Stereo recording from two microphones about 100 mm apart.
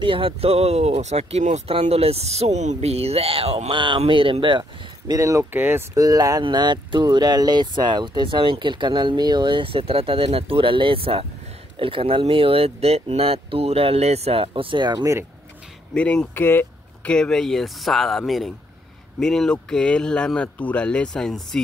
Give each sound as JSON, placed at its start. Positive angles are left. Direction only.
{"t": 0.0, "sound": "speech", "side_deg": -65}
{"t": 3.7, "sound": "speech", "side_deg": -55}
{"t": 5.1, "sound": "speech", "side_deg": -30}
{"t": 5.5, "sound": "speech", "side_deg": -20}
{"t": 5.9, "sound": "speech", "side_deg": -35}
{"t": 6.4, "sound": "speech", "side_deg": -50}
{"t": 15.9, "sound": "speech", "side_deg": 10}
{"t": 17.1, "sound": "speech", "side_deg": 5}